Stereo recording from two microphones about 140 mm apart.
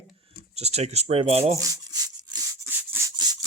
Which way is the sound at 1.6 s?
25° right (ahead or behind).